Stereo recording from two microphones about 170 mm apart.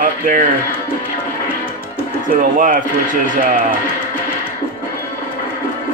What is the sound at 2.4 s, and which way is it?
Speech, 55° right (ahead or behind).